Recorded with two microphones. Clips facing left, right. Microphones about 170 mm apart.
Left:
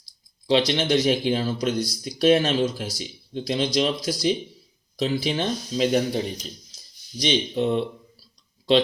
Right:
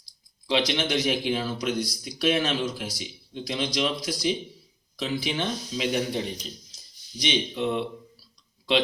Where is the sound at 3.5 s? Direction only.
25° left (ahead or behind).